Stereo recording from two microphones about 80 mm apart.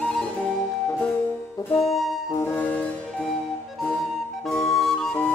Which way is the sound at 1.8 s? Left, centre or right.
Centre.